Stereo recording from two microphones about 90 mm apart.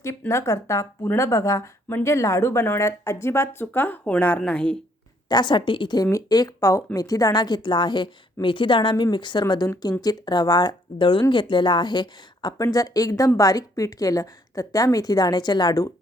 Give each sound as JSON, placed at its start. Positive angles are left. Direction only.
{"t": 0.3, "sound": "a woman's voice", "side_deg": 35}
{"t": 5.3, "sound": "speech", "side_deg": 55}
{"t": 6.0, "sound": "speech", "side_deg": 40}
{"t": 12.7, "sound": "a woman's voice", "side_deg": 40}